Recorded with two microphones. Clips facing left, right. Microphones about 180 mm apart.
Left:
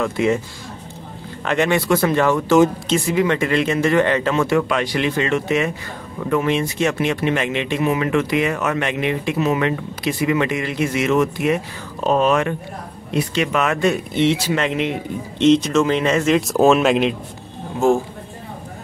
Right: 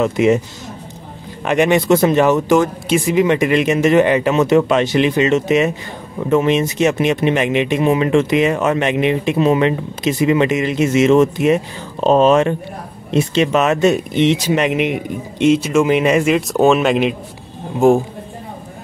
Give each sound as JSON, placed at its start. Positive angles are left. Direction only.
{"t": 0.0, "sound": "speech", "side_deg": -20}
{"t": 1.4, "sound": "speech", "side_deg": -15}
{"t": 16.3, "sound": "speech", "side_deg": 0}
{"t": 17.7, "sound": "speech", "side_deg": -15}